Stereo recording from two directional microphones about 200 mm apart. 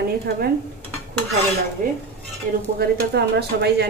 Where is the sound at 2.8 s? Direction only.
55° right (ahead or behind).